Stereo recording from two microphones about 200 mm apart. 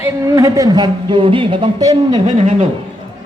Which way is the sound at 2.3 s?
35° right (ahead or behind).